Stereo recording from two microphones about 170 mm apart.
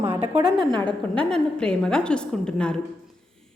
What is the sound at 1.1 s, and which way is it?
A woman's voice, 5° left (ahead or behind).